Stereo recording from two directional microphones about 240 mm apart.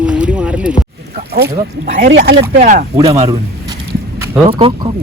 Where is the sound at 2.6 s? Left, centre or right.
Right.